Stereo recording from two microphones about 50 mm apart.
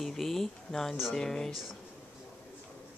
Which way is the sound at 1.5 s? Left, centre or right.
Centre.